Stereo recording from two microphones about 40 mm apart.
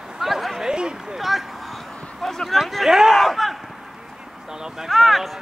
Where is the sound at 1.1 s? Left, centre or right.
Centre.